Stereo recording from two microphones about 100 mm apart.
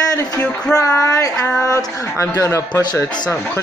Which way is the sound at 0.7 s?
30° left (ahead or behind).